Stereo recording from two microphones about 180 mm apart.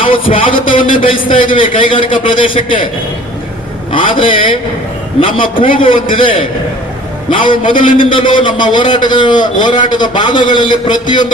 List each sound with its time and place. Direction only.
0.0 s a man's voice: 30° left (ahead or behind)
3.9 s a man's voice: 30° left (ahead or behind)